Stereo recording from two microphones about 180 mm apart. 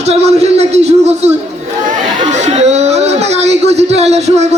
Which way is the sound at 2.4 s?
40° right (ahead or behind).